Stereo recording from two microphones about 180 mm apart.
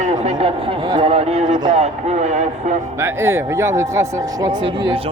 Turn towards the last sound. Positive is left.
turn(degrees=-15)  # may be behind; listen again after turning